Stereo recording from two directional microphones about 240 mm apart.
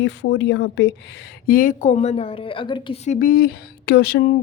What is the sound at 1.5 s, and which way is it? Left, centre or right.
Speech, left.